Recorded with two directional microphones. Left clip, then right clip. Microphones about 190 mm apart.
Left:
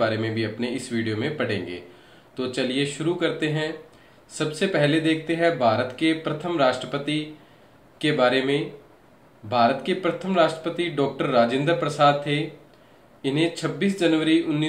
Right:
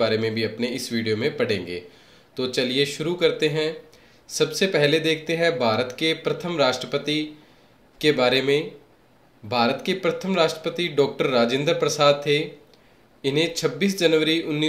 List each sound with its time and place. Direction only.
0.0 s speech: 45° right (ahead or behind)